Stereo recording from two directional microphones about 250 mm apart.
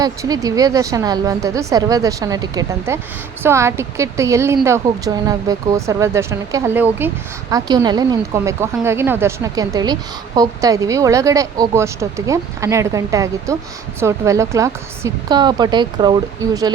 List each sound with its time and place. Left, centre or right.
0.0 s a woman's voice: centre